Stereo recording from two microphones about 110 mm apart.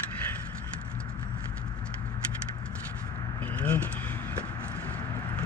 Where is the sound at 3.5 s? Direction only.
15° left (ahead or behind).